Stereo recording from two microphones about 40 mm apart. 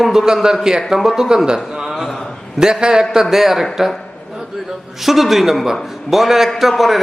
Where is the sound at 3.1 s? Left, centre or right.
Centre.